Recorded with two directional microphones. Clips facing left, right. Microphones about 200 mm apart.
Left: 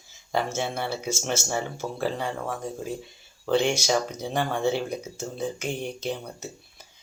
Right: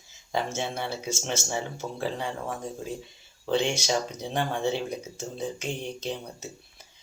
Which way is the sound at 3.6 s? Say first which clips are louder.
Left 3 dB; 10° left (ahead or behind).